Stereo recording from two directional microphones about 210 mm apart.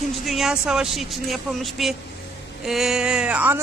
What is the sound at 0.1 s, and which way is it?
A woman's voice, centre (ahead or behind).